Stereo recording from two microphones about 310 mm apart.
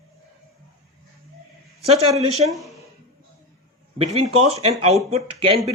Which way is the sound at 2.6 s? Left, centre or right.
Centre.